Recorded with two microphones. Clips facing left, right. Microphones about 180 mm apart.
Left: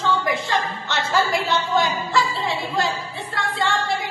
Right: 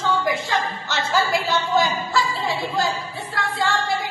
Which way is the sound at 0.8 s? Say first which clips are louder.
Left 1 dB; centre (ahead or behind).